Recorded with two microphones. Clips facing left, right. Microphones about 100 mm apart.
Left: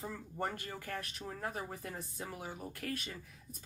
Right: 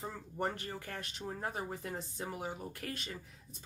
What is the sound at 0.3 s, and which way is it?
Speech, 20° right (ahead or behind).